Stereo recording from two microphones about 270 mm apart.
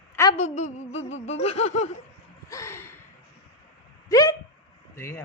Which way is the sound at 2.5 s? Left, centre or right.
Centre.